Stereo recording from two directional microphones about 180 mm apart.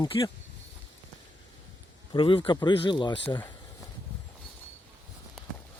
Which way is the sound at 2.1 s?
25° left (ahead or behind).